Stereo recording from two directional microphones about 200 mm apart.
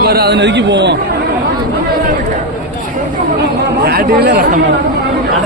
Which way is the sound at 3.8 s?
50° right (ahead or behind).